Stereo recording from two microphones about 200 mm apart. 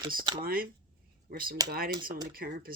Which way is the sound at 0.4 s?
45° right (ahead or behind).